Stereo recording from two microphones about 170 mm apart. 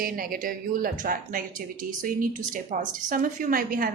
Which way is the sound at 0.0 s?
60° right (ahead or behind).